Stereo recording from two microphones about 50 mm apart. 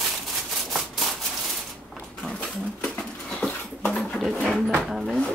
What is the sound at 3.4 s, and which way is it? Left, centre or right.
Dog, centre.